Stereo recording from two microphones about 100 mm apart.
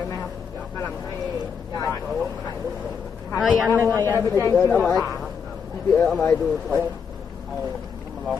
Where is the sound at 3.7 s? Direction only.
25° right (ahead or behind).